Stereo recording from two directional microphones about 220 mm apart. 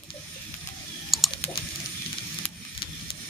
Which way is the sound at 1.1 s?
Centre (ahead or behind).